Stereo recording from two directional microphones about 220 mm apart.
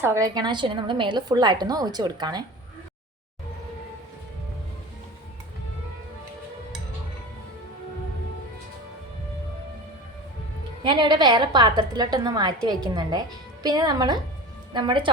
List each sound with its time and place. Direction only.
0.0 s a woman's voice: 15° right (ahead or behind)
10.8 s a woman's voice: 20° right (ahead or behind)